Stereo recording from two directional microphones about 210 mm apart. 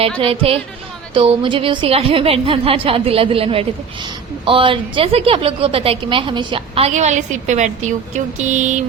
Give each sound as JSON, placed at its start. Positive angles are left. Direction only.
{"t": 0.2, "sound": "a woman's voice", "side_deg": -25}